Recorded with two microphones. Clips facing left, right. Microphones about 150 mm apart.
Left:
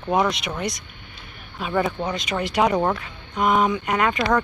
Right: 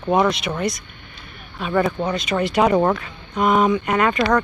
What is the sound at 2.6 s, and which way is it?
Speech, centre (ahead or behind).